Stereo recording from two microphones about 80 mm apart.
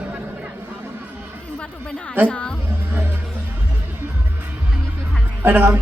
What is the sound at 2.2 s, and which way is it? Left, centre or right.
Speech, centre.